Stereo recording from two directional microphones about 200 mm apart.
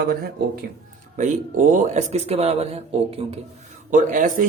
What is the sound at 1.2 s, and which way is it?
Speech, 40° right (ahead or behind).